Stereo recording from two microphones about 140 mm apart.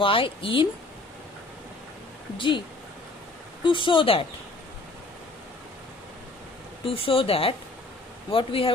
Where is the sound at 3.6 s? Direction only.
35° left (ahead or behind).